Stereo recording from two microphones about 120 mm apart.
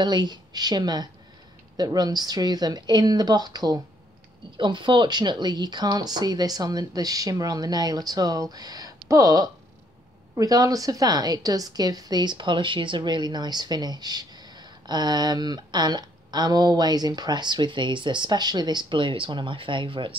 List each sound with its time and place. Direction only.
0.0 s a woman's voice: 35° right (ahead or behind)